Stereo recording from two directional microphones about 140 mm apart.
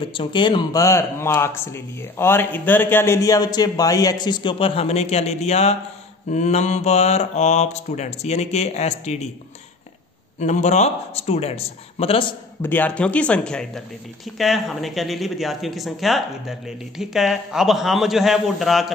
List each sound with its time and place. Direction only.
0.0 s speech: 35° left (ahead or behind)
0.8 s a man's voice: 20° left (ahead or behind); by 5.8 s 50° left (ahead or behind)
6.3 s mantra: 55° left (ahead or behind)
10.4 s mantra: 55° left (ahead or behind); by 12.4 s 40° left (ahead or behind)
12.6 s speech: 10° left (ahead or behind)